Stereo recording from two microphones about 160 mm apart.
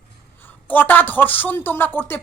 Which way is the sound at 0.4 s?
10° left (ahead or behind).